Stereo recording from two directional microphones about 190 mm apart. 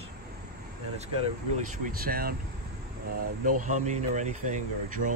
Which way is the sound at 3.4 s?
40° right (ahead or behind).